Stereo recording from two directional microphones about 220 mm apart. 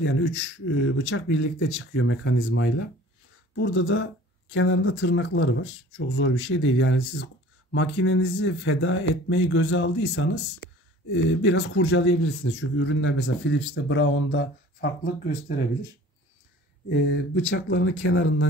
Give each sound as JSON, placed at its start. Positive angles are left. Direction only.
{"t": 0.0, "sound": "speech", "side_deg": 60}
{"t": 16.9, "sound": "speech", "side_deg": 45}